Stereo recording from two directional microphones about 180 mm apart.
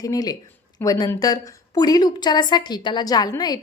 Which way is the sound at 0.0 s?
20° left (ahead or behind).